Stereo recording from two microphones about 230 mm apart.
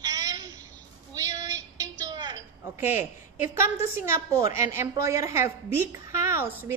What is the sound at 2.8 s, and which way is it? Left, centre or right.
A woman's voice, centre.